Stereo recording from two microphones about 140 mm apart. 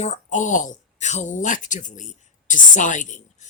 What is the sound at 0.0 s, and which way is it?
Speech, 60° left (ahead or behind).